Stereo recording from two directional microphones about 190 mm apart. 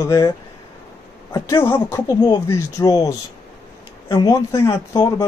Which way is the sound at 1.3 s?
15° left (ahead or behind).